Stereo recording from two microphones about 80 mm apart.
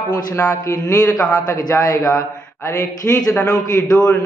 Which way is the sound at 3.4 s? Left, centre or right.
Left.